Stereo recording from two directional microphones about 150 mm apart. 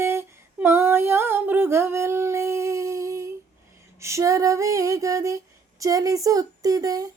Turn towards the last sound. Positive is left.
turn(degrees=-25)  # may be behind; listen again after turning